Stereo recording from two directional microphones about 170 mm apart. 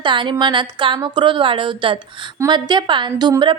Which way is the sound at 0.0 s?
30° right (ahead or behind).